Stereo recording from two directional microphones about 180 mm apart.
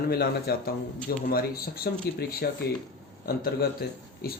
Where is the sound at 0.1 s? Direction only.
60° left (ahead or behind).